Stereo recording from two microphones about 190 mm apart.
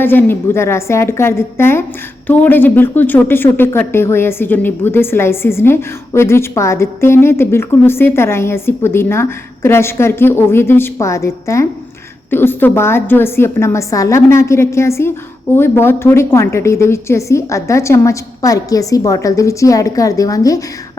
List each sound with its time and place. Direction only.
0.0 s speech: 10° left (ahead or behind)